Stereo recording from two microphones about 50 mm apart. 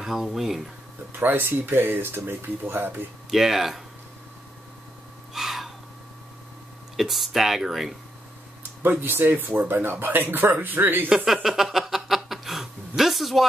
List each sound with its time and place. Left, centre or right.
0.0 s speech: centre
1.1 s speech: right
3.3 s speech: centre
5.3 s gasp: centre
7.0 s speech: centre
8.8 s speech: right
11.4 s chuckle: centre